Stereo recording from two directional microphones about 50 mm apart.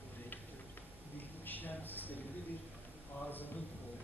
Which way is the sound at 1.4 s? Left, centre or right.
Left.